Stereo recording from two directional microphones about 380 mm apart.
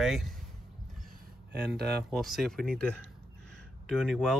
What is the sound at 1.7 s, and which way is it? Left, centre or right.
Speech, right.